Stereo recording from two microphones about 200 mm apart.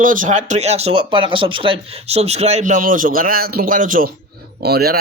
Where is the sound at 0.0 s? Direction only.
40° right (ahead or behind).